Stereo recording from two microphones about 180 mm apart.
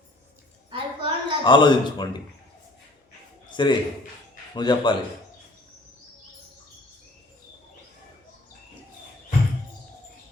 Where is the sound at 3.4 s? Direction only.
25° left (ahead or behind).